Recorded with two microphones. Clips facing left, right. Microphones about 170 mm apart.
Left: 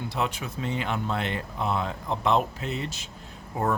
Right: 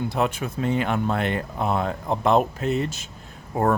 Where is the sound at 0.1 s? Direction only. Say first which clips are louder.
Right 5 dB; 50° right (ahead or behind).